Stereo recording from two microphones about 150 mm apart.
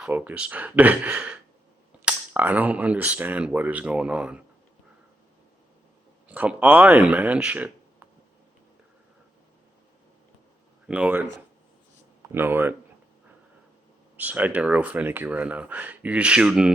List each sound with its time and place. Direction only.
0.0 s speech: 10° right (ahead or behind)
6.2 s speech: 10° right (ahead or behind)
10.8 s speech: 10° right (ahead or behind)
14.2 s speech: 10° right (ahead or behind)